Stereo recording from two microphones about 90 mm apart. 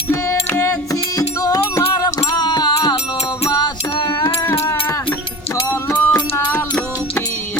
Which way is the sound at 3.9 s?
60° left (ahead or behind).